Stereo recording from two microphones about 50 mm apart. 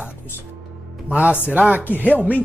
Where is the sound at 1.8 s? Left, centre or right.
Left.